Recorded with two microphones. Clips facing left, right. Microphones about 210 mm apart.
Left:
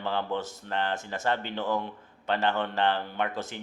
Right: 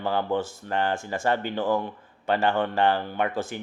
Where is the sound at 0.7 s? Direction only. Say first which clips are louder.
Right 4 dB; 50° right (ahead or behind).